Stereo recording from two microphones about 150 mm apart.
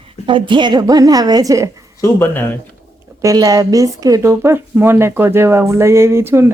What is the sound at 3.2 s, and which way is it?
A woman's voice, 25° right (ahead or behind).